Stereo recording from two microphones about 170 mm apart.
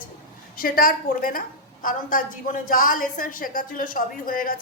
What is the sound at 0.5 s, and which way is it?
A woman's voice, 60° left (ahead or behind).